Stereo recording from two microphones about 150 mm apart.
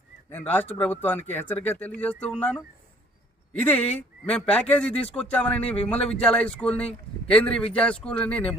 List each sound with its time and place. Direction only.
0.3 s speech: 10° left (ahead or behind)